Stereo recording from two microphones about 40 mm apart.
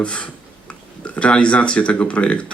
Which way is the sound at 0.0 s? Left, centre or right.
Left.